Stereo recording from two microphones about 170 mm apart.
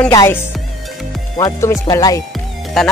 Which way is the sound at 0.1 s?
20° left (ahead or behind).